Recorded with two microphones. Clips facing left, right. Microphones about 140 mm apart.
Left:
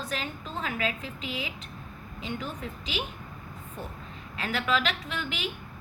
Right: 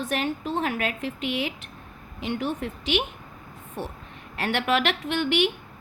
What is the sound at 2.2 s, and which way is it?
Speech, 80° right.